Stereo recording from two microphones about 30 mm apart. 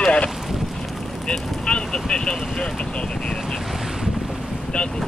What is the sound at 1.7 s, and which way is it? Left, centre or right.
Speech, left.